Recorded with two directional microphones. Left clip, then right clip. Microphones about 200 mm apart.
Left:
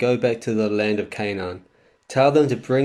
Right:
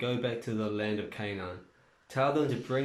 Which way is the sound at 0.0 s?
45° left (ahead or behind).